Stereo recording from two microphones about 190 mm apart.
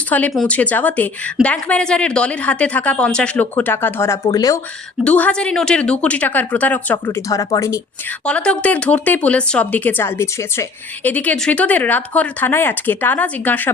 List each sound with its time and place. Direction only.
0.1 s speech: 5° left (ahead or behind)
5.0 s speech: 5° left (ahead or behind)
8.2 s speech: 5° left (ahead or behind)